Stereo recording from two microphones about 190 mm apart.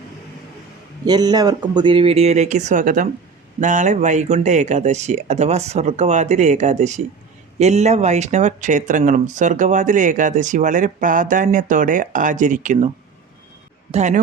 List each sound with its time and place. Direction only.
1.0 s speech: 20° right (ahead or behind); by 12.9 s 40° right (ahead or behind)
13.9 s speech: 40° right (ahead or behind)